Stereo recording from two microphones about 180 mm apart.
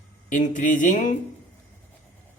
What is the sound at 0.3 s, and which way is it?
Speech, 45° left (ahead or behind).